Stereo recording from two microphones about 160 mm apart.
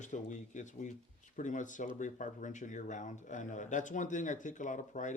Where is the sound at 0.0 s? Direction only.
50° left (ahead or behind).